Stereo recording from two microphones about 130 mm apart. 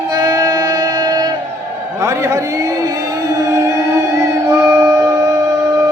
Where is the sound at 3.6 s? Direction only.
25° right (ahead or behind).